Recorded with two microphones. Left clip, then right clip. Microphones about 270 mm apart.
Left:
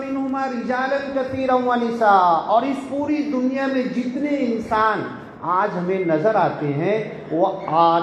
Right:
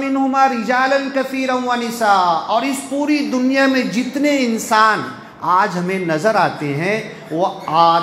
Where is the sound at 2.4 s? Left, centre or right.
Right.